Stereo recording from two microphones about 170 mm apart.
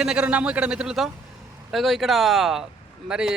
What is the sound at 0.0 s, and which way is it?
Speech, 5° right (ahead or behind).